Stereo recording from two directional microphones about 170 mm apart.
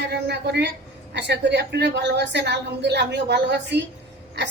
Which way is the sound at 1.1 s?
90° right.